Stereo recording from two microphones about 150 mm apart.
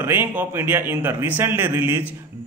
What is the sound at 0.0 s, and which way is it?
Speech, 15° right (ahead or behind).